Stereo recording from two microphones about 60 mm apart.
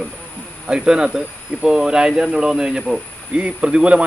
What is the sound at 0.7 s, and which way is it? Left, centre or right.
Speech, centre.